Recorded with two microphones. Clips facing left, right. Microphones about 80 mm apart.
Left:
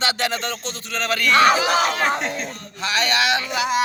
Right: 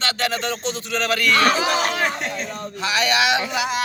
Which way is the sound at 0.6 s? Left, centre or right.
Centre.